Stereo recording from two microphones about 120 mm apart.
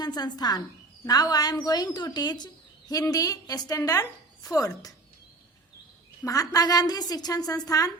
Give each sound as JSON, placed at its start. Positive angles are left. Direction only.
{"t": 0.0, "sound": "a woman's voice", "side_deg": 35}
{"t": 6.2, "sound": "a woman's voice", "side_deg": 30}